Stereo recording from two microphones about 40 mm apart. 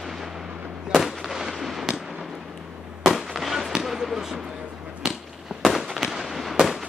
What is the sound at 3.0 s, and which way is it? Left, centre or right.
Fireworks, centre.